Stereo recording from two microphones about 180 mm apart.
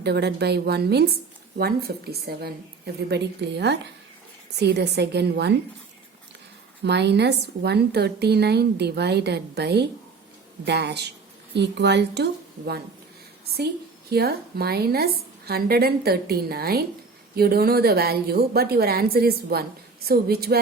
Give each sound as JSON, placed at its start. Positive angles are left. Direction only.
{"t": 0.0, "sound": "a woman's voice", "side_deg": -65}
{"t": 6.8, "sound": "a woman's voice", "side_deg": -70}
{"t": 14.1, "sound": "a woman's voice", "side_deg": -60}